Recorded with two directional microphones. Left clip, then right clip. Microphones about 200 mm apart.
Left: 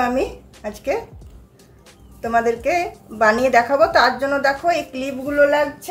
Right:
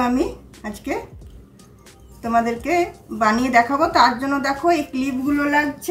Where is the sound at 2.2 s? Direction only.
25° left (ahead or behind).